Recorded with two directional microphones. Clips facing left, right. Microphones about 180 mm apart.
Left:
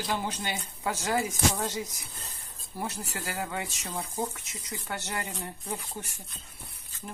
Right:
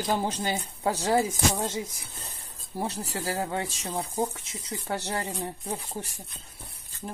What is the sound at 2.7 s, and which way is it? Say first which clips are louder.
Speech: right 4 dB; 30° right (ahead or behind).